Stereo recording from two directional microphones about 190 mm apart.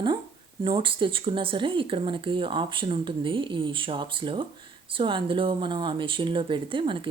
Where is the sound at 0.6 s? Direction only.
25° right (ahead or behind).